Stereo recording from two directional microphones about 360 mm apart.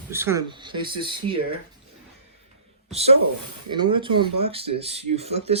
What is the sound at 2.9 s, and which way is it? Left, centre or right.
Speech, centre.